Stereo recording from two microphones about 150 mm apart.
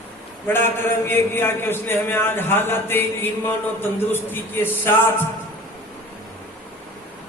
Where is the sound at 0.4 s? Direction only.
15° left (ahead or behind).